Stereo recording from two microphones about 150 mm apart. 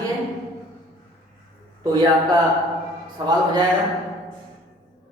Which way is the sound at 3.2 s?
30° right (ahead or behind).